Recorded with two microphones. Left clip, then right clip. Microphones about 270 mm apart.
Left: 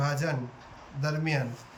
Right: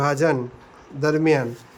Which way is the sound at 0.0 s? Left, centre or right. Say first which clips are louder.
Right 11 dB; centre.